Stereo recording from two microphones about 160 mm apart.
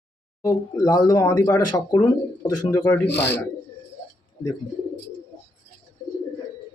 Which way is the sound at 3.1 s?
90° left.